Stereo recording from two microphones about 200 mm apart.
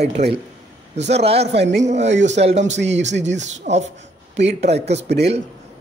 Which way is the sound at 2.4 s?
35° right (ahead or behind).